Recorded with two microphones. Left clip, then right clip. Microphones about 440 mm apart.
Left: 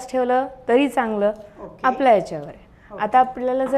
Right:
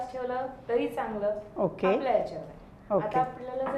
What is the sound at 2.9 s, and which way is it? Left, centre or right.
Speech, right.